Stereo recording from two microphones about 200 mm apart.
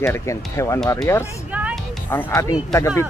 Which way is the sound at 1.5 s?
5° right (ahead or behind).